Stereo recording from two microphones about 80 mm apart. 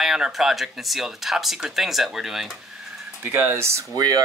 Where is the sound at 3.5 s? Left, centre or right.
Right.